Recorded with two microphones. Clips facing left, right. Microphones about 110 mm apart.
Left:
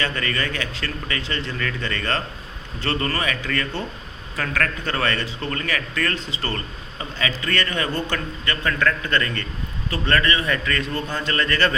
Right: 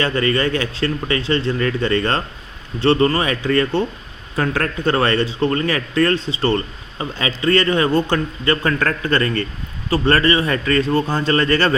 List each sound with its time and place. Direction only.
0.0 s a man's voice: 30° right (ahead or behind)